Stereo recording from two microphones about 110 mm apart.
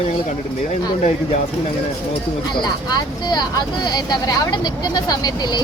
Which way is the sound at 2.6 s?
40° left (ahead or behind).